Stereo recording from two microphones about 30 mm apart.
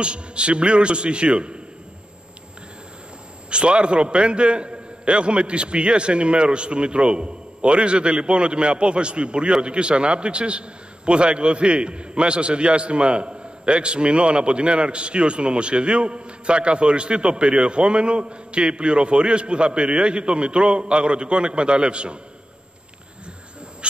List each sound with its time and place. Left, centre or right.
0.0 s a man's voice: right
3.4 s a man's voice: right